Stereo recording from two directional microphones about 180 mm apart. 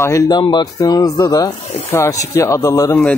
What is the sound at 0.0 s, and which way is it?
Speech, 20° left (ahead or behind).